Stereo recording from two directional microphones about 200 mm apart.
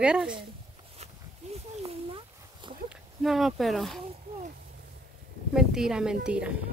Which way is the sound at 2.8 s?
Centre (ahead or behind).